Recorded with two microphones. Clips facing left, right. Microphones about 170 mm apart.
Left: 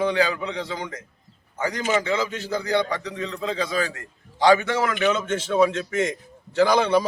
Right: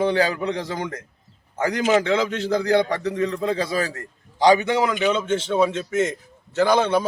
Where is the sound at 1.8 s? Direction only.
70° right (ahead or behind).